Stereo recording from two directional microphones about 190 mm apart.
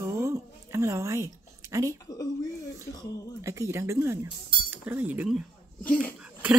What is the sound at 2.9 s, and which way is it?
Speech, 20° left (ahead or behind).